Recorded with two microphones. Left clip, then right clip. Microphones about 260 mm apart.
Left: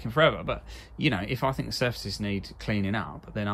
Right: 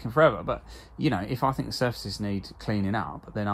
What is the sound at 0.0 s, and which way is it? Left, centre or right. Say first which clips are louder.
Speech: right 2 dB; centre.